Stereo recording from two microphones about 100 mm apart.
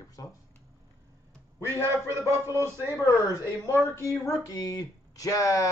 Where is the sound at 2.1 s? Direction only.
25° right (ahead or behind).